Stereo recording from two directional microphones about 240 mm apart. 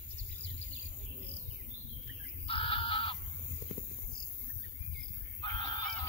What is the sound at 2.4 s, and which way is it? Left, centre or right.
Bird, left.